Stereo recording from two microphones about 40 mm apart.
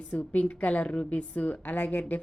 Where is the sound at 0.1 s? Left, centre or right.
Left.